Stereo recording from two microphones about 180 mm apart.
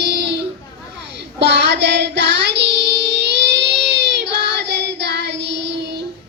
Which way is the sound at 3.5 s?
70° right (ahead or behind).